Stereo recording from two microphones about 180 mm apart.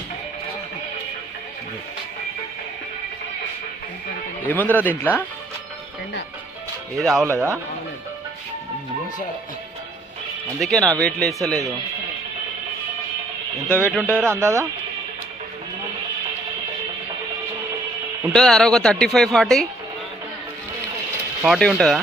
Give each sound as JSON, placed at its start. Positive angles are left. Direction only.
{"t": 4.4, "sound": "speech", "side_deg": 10}
{"t": 6.9, "sound": "speech", "side_deg": 0}
{"t": 7.3, "sound": "speech", "side_deg": -15}
{"t": 10.6, "sound": "speech", "side_deg": 0}
{"t": 13.7, "sound": "speech", "side_deg": 10}
{"t": 14.3, "sound": "speech", "side_deg": -15}
{"t": 18.3, "sound": "speech", "side_deg": 0}
{"t": 21.4, "sound": "speech", "side_deg": -5}